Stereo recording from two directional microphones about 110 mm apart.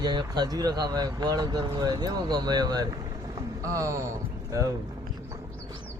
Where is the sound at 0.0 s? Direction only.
40° right (ahead or behind).